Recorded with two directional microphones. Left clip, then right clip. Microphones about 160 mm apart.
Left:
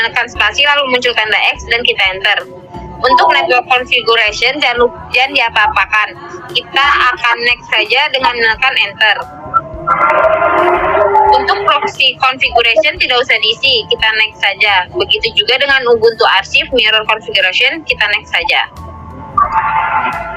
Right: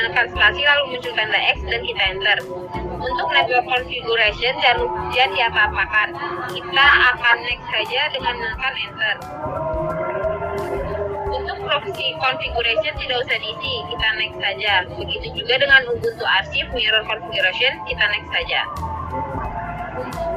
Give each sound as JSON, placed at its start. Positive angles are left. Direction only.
{"t": 0.0, "sound": "speech", "side_deg": 60}